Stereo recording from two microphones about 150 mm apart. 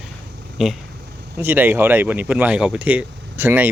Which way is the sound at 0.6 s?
Centre (ahead or behind).